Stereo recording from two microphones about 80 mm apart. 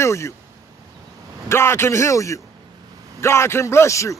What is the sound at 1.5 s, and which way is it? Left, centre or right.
A man's voice, left.